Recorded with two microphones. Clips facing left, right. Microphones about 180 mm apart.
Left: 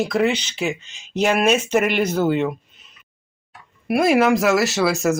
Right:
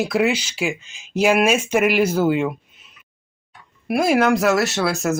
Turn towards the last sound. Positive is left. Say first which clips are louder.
# left 2 dB
turn(degrees=0)  # may be behind; listen again after turning